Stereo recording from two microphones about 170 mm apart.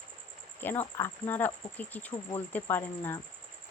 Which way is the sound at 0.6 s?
10° left (ahead or behind).